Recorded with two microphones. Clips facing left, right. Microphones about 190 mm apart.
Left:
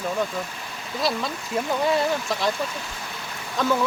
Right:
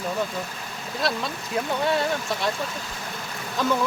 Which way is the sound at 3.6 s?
Centre (ahead or behind).